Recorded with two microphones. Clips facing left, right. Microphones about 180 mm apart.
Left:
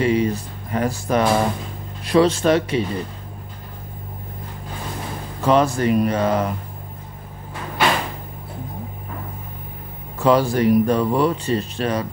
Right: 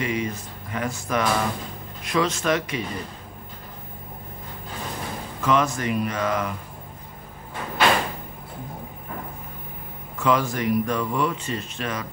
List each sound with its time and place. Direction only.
0.0 s speech: 35° left (ahead or behind)
5.4 s speech: 35° left (ahead or behind)
10.1 s speech: 35° left (ahead or behind)